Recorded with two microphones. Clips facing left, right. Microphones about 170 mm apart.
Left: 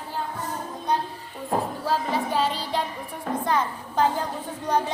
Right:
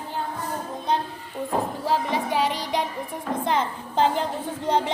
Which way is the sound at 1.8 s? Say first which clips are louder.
Right 1 dB; 15° right (ahead or behind).